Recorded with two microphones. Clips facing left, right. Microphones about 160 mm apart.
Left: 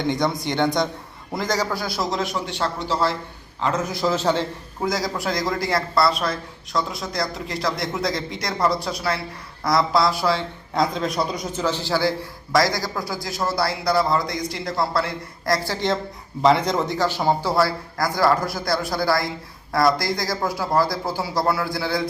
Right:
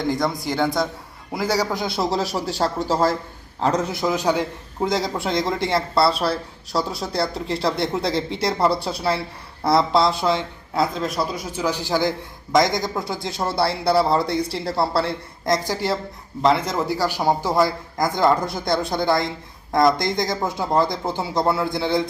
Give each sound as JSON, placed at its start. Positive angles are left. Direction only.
{"t": 0.0, "sound": "a man's voice", "side_deg": 0}
{"t": 1.7, "sound": "speech", "side_deg": -25}
{"t": 3.8, "sound": "a man's voice", "side_deg": -20}
{"t": 4.8, "sound": "speech", "side_deg": -25}
{"t": 10.8, "sound": "speech", "side_deg": 0}